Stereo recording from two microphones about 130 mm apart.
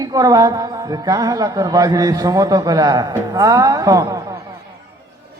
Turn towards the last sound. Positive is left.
turn(degrees=-25)  # may be behind; listen again after turning